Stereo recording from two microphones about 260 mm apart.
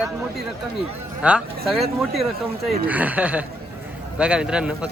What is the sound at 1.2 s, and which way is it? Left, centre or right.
Speech, centre.